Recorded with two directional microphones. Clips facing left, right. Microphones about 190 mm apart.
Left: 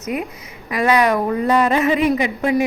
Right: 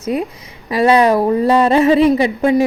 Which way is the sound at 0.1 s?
30° right (ahead or behind).